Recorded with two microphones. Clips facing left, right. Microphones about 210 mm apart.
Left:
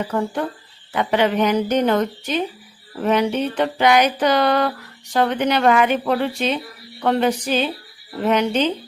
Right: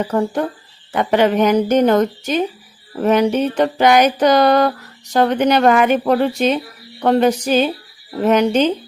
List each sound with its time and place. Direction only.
0.0 s music: 40° right (ahead or behind)